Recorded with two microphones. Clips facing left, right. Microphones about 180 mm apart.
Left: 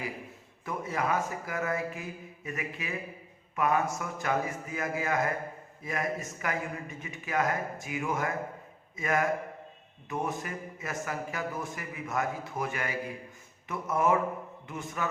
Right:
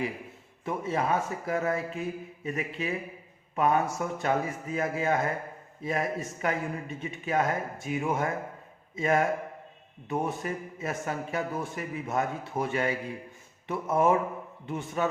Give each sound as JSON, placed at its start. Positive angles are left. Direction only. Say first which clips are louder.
{"t": 0.6, "sound": "speech", "louder": "right 3 dB", "side_deg": -25}